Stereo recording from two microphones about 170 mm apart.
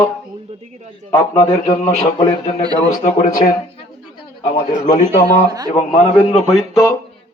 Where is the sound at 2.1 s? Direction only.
25° left (ahead or behind).